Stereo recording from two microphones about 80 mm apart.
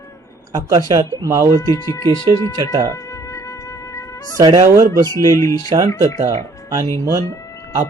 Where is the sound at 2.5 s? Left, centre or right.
Right.